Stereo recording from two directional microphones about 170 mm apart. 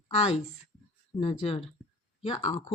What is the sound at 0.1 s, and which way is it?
Speech, 40° left (ahead or behind).